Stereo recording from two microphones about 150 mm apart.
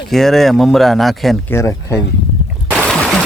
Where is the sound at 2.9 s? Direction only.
5° left (ahead or behind).